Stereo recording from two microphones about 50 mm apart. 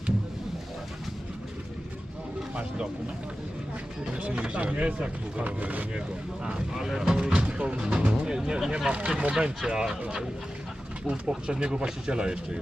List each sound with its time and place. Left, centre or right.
2.6 s vehicle: centre
4.2 s speech: right
6.4 s speech: centre
9.6 s speech: centre
11.0 s speech: centre